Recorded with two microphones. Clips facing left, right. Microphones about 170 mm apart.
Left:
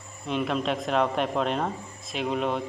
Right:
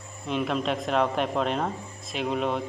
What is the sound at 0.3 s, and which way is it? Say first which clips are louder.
Speech: even; centre (ahead or behind).